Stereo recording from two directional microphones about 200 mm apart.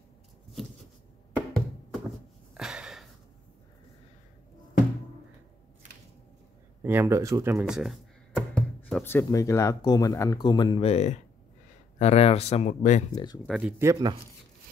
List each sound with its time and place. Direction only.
2.5 s a sound: 5° right (ahead or behind)
6.8 s speech: 10° right (ahead or behind)
7.5 s music: 5° right (ahead or behind)
9.0 s speech: 15° left (ahead or behind); by 13.0 s 35° left (ahead or behind)
13.1 s speech: 20° left (ahead or behind)
13.5 s speech: 5° right (ahead or behind)